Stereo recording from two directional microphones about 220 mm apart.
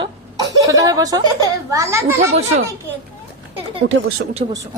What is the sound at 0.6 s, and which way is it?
A woman's voice, 15° right (ahead or behind).